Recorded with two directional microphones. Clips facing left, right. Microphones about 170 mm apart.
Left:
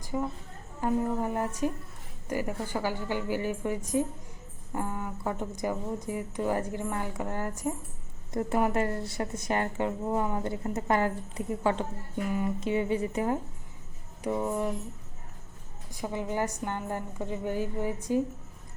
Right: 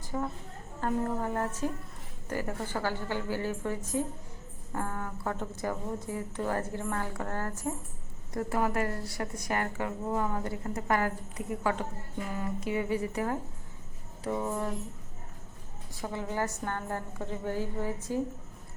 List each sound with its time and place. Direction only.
0.0 s a sound: 10° left (ahead or behind)
0.8 s a woman's voice: 15° left (ahead or behind)
15.9 s speech: 15° left (ahead or behind)